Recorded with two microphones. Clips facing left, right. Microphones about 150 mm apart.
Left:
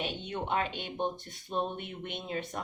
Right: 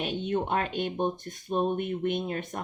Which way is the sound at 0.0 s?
50° right (ahead or behind).